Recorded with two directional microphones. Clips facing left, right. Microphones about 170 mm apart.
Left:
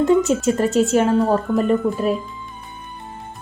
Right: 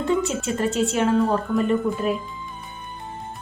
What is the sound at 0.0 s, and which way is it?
Speech, 40° left (ahead or behind).